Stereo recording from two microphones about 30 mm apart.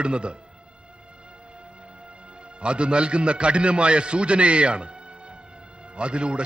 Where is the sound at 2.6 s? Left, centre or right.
Right.